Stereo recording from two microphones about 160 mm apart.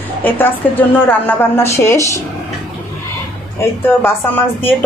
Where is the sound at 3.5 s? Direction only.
15° left (ahead or behind).